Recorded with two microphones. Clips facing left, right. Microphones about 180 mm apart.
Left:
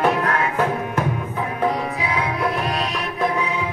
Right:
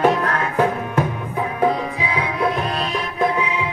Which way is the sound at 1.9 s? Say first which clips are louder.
Even; 30° right (ahead or behind).